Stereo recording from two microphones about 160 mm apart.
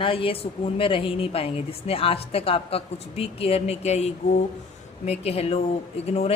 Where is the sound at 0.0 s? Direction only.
35° left (ahead or behind).